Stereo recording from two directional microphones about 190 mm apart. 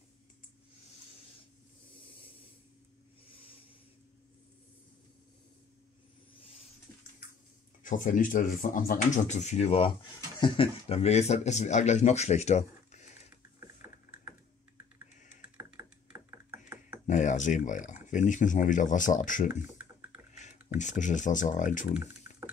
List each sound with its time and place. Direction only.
3.3 s a sound: 30° left (ahead or behind)
7.8 s speech: 45° left (ahead or behind)
15.5 s a sound: 10° right (ahead or behind)
17.0 s speech: 40° left (ahead or behind)
19.6 s computer keyboard: 10° right (ahead or behind)
20.3 s speech: 40° left (ahead or behind)